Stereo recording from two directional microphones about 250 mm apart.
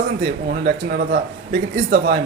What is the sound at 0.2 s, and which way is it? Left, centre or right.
Speech, right.